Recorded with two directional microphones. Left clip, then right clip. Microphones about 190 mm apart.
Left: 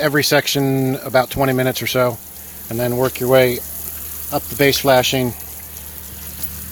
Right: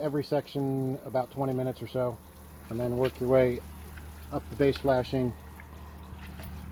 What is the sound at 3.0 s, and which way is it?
Speech, 50° left (ahead or behind).